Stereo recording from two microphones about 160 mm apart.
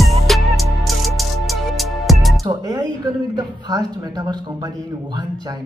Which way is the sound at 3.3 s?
25° right (ahead or behind).